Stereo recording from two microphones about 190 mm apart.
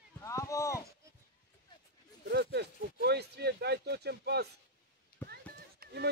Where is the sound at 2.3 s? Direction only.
60° right (ahead or behind).